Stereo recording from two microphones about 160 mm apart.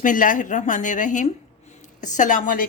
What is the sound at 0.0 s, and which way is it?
A woman's voice, 55° left (ahead or behind).